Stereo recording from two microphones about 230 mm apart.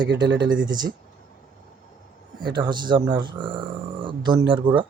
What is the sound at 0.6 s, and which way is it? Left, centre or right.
Speech, centre.